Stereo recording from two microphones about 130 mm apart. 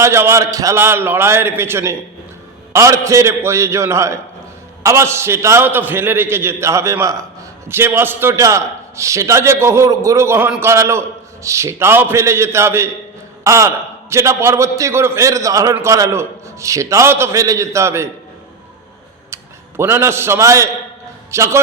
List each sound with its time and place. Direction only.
0.0 s a man's voice: 20° right (ahead or behind)
19.3 s a man's voice: 20° right (ahead or behind)